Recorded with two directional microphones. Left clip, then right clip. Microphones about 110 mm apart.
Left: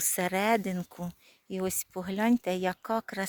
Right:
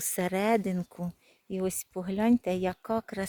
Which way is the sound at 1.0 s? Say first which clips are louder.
Right 1 dB; 10° right (ahead or behind).